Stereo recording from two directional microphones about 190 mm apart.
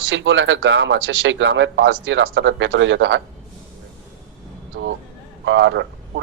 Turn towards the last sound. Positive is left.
turn(degrees=-70)  # may be behind; listen again after turning